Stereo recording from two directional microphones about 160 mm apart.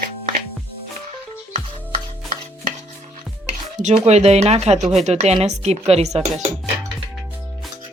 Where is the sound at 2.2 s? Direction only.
50° right (ahead or behind).